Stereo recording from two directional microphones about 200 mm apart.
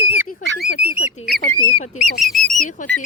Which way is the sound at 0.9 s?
35° left (ahead or behind).